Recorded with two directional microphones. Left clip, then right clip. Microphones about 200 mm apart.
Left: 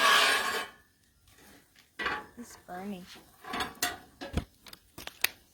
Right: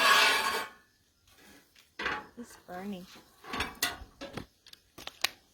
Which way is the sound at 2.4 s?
5° left (ahead or behind).